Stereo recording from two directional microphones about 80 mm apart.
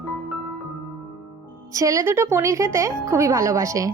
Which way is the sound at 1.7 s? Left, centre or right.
Right.